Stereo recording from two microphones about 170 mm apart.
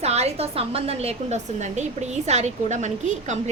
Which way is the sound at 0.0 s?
40° right (ahead or behind).